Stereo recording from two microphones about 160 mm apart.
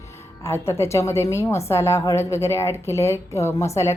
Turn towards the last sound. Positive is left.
turn(degrees=20)  # may be behind; listen again after turning